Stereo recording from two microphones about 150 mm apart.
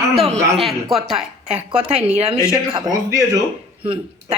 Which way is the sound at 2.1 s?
45° right (ahead or behind).